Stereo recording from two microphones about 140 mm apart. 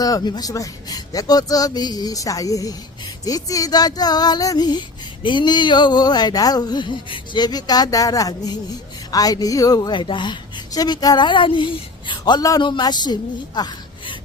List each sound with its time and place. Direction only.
0.0 s a woman's voice: 25° left (ahead or behind)